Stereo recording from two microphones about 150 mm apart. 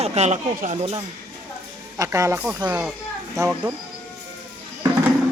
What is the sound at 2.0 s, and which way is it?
Speech, 20° right (ahead or behind).